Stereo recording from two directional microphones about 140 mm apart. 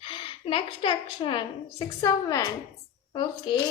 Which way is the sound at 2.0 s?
25° left (ahead or behind).